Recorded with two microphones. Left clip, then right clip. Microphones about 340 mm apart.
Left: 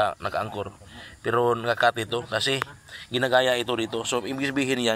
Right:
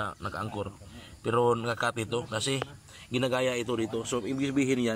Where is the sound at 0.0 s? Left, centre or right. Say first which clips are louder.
Left 9 dB; centre.